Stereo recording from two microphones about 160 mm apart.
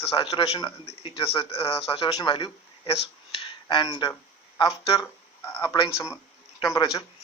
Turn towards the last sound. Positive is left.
turn(degrees=20)  # may be behind; listen again after turning